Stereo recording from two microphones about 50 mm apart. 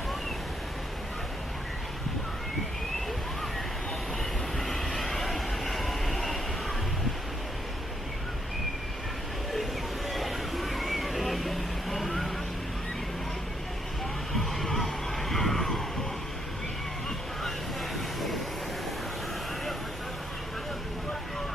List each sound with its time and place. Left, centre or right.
4.6 s vehicle: centre
9.5 s a sound: centre
14.3 s vehicle: centre